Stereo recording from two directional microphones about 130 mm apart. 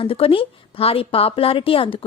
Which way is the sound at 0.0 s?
45° left (ahead or behind).